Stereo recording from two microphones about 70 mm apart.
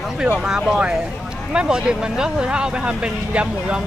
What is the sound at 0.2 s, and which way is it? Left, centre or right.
Speech, centre.